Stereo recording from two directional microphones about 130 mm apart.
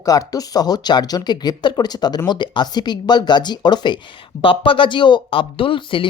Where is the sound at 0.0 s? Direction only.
25° left (ahead or behind).